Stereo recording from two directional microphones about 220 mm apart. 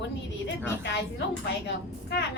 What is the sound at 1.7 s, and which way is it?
Speech, 50° left (ahead or behind).